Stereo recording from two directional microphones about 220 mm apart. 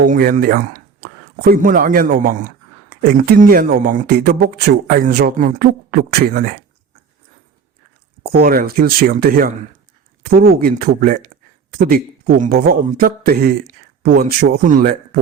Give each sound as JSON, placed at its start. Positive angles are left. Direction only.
{"t": 0.0, "sound": "speech", "side_deg": -40}
{"t": 8.3, "sound": "speech", "side_deg": -40}